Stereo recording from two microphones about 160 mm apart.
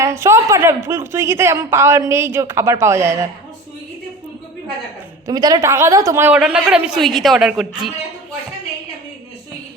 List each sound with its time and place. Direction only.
0.0 s a woman's voice: 15° right (ahead or behind)
5.2 s a woman's voice: 25° right (ahead or behind); by 7.9 s 5° right (ahead or behind)